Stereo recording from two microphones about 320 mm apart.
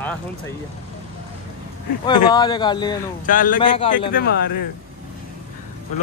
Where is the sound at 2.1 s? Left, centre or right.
Centre.